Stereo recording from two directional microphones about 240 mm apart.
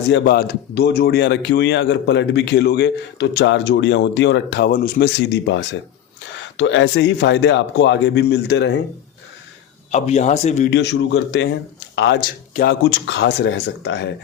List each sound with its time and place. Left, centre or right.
0.1 s speech: left
9.9 s speech: left
10.7 s speech: left